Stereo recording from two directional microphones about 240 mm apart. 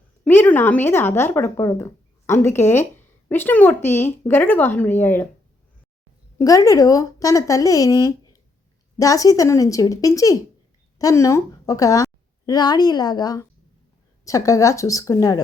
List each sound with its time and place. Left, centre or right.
0.3 s speech: centre
6.4 s speech: centre